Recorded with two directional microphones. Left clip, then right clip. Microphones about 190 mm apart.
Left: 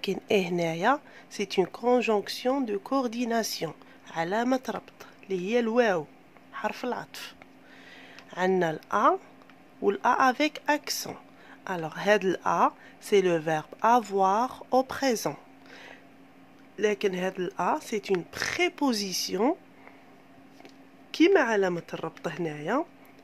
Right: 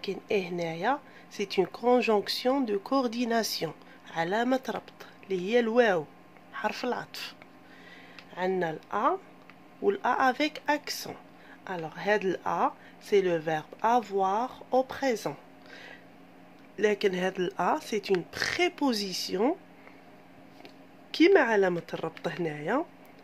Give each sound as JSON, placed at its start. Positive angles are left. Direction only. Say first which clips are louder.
{"t": 0.0, "sound": "speech", "louder": "left 4 dB", "side_deg": 35}
{"t": 8.3, "sound": "speech", "louder": "left 4 dB", "side_deg": 30}
{"t": 21.1, "sound": "speech", "louder": "even", "side_deg": 10}